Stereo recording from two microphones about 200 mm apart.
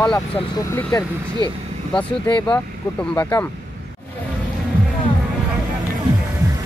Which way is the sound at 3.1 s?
10° left (ahead or behind).